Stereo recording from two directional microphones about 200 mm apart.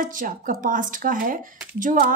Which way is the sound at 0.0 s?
40° right (ahead or behind).